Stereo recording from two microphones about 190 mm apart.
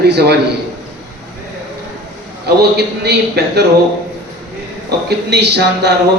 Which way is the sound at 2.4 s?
60° right (ahead or behind).